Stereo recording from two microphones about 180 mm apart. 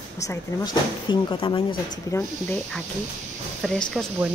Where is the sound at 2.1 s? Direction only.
10° left (ahead or behind).